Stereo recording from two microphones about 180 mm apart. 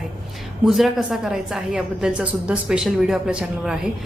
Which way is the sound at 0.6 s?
Centre (ahead or behind).